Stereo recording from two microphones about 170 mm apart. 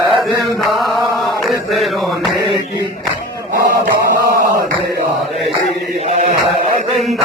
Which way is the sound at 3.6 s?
60° right (ahead or behind).